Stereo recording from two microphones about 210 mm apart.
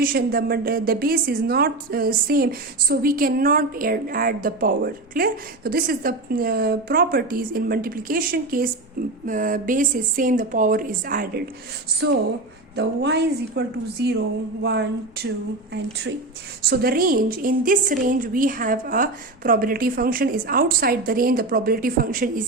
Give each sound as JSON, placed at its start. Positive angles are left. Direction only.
{"t": 0.0, "sound": "a woman's voice", "side_deg": -45}
{"t": 11.9, "sound": "a woman's voice", "side_deg": -50}
{"t": 16.6, "sound": "a woman's voice", "side_deg": -45}